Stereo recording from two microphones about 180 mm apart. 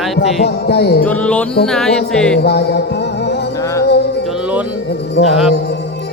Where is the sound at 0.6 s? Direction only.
65° left (ahead or behind).